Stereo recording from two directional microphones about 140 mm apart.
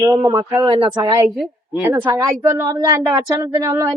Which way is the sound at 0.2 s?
30° right (ahead or behind).